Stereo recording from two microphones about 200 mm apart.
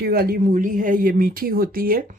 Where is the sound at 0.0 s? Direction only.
50° right (ahead or behind).